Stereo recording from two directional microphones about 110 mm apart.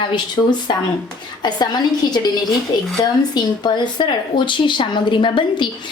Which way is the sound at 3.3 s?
40° left (ahead or behind).